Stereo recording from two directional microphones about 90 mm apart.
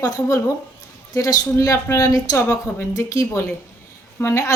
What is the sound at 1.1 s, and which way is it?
A woman's voice, 40° left (ahead or behind).